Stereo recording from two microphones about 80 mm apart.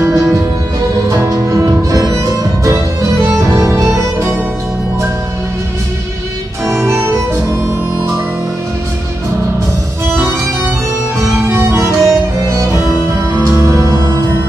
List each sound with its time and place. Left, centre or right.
1.1 s music: right
6.7 s music: right
11.4 s music: right